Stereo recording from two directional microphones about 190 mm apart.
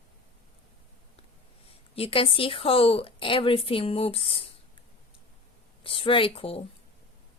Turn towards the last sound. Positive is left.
turn(degrees=30)  # may be behind; listen again after turning